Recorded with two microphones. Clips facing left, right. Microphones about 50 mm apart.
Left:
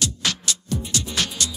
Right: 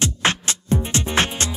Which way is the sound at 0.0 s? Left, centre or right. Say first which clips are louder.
Right 5 dB; right.